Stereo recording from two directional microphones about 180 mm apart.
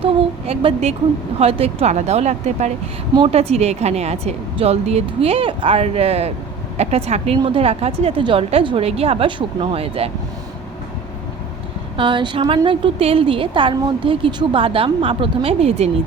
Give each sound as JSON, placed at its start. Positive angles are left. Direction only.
{"t": 0.0, "sound": "a sound", "side_deg": -30}
{"t": 1.4, "sound": "a woman's voice", "side_deg": -35}
{"t": 11.9, "sound": "a woman's voice", "side_deg": -25}